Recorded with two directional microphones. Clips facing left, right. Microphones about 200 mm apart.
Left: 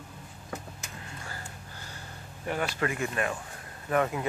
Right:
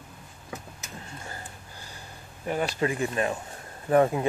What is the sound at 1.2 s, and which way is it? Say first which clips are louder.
Gasp: right 1 dB; 20° right (ahead or behind).